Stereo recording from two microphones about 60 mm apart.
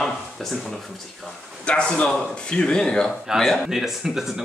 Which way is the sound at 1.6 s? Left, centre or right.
Centre.